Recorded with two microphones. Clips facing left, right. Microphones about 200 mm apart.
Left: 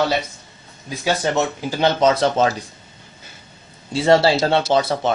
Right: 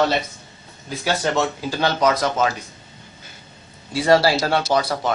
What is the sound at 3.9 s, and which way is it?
Speech, 25° left (ahead or behind).